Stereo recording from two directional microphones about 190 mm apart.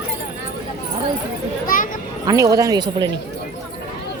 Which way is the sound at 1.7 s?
45° left (ahead or behind).